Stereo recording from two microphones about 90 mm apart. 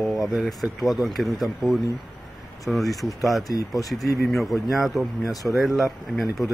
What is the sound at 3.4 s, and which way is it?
Speech, 40° left (ahead or behind).